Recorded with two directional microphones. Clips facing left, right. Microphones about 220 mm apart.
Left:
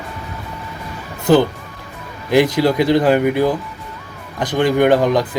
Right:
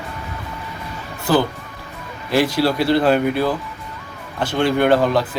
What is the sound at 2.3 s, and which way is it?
Speech, 15° left (ahead or behind).